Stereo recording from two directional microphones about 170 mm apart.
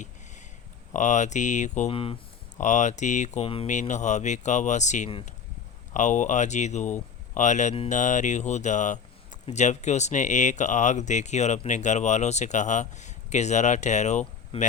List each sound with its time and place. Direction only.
0.9 s speech: 45° left (ahead or behind)
2.6 s speech: 45° left (ahead or behind)